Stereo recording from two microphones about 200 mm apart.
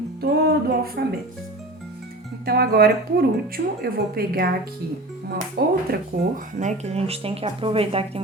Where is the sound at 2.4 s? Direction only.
50° right (ahead or behind).